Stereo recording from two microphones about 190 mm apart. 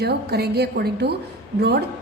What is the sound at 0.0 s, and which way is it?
A woman's voice, 55° right (ahead or behind).